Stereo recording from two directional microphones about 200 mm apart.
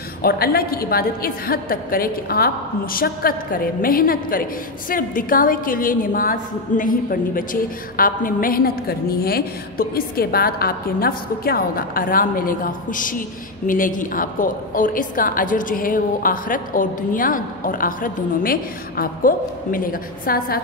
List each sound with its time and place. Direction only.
0.2 s a woman's voice: 50° left (ahead or behind)